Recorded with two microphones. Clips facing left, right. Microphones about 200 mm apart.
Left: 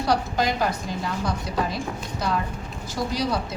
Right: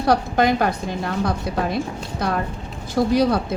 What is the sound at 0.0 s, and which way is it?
A woman's voice, 55° right (ahead or behind).